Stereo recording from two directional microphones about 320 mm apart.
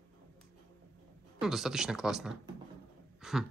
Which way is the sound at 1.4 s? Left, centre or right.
Centre.